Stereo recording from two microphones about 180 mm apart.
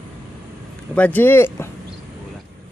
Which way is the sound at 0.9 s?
10° left (ahead or behind).